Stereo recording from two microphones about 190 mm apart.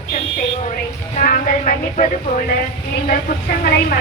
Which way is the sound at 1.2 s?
40° left (ahead or behind).